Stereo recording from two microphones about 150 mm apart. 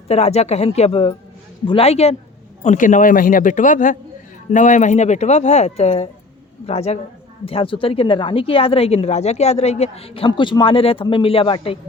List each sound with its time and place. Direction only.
0.1 s speech: 45° left (ahead or behind)
2.6 s a man's voice: 60° left (ahead or behind); by 11.8 s 35° left (ahead or behind)